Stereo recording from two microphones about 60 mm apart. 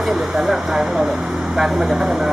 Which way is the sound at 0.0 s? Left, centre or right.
Centre.